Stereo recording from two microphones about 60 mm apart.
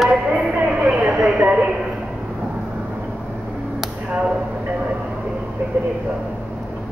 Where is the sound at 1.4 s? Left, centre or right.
Right.